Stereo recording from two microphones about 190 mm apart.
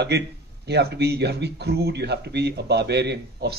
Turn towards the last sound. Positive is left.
turn(degrees=-60)  # may be behind; listen again after turning